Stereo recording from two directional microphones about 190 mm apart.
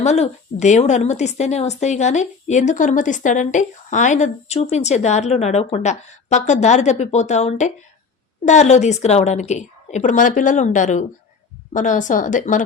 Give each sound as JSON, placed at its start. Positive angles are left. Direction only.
{"t": 0.0, "sound": "a woman's voice", "side_deg": 35}